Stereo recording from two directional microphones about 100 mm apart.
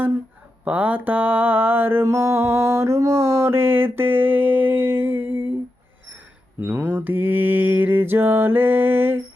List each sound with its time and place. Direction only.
0.6 s mantra: 15° right (ahead or behind)
6.6 s mantra: 20° right (ahead or behind)